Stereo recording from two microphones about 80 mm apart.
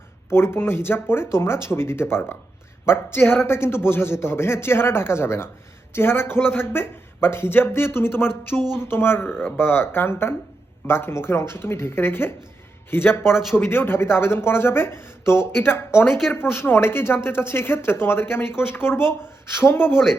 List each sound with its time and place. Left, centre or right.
0.3 s a man's voice: left
8.5 s speech: centre
8.9 s a man's voice: left